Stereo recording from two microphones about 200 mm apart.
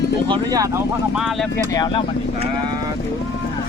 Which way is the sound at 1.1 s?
Centre (ahead or behind).